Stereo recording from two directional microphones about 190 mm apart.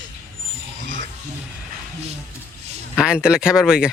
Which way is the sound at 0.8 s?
70° right (ahead or behind).